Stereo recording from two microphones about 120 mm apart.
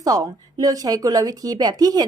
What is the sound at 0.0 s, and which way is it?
A woman's voice, 30° right (ahead or behind).